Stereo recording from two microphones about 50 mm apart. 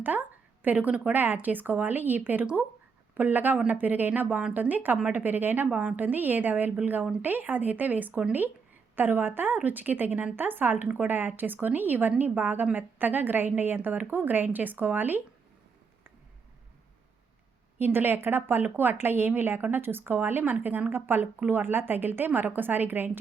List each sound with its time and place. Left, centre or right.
0.0 s a sound: right
1.1 s a woman's voice: right
17.7 s a woman's voice: right